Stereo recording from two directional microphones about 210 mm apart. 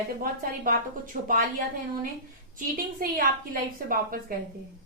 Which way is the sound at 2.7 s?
40° right (ahead or behind).